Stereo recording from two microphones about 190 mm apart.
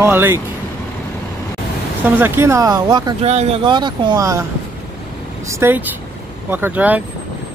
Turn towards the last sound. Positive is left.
turn(degrees=-10)  # may be behind; listen again after turning